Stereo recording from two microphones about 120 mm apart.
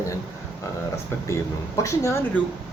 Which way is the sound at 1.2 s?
25° left (ahead or behind).